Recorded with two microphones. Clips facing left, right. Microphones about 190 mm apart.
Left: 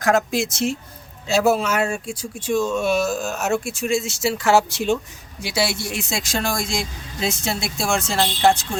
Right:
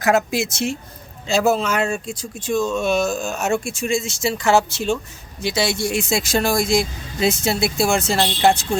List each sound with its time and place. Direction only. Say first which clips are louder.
0.0 s speech: right 1 dB; 5° right (ahead or behind)
4.7 s a woman's voice: left 1 dB; 15° left (ahead or behind); by 8.8 s centre (ahead or behind)